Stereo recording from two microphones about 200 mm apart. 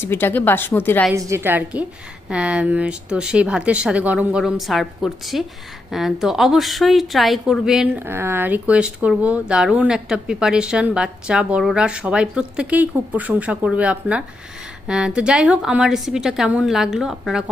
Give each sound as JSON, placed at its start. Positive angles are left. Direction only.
{"t": 0.0, "sound": "a woman's voice", "side_deg": 10}
{"t": 1.1, "sound": "a woman's voice", "side_deg": -10}